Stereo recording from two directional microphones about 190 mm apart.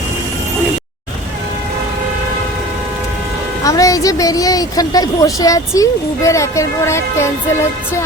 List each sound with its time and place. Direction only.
3.6 s a woman's voice: 15° left (ahead or behind)